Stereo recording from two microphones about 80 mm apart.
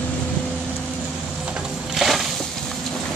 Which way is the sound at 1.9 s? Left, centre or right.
Centre.